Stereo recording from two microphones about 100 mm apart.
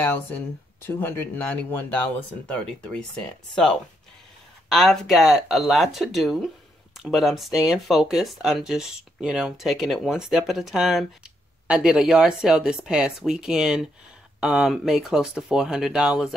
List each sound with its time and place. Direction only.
0.0 s speech: 20° left (ahead or behind)
4.6 s speech: centre (ahead or behind)